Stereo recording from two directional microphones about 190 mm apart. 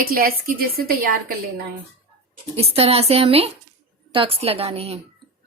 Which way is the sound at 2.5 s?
30° right (ahead or behind).